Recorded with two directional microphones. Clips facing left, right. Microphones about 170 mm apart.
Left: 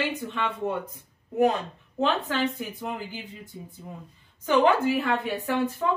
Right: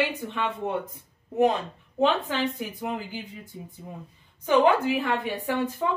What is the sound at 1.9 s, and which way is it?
Speech, 15° right (ahead or behind).